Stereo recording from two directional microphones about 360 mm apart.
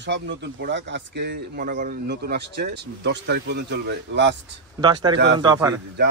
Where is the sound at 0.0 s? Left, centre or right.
Right.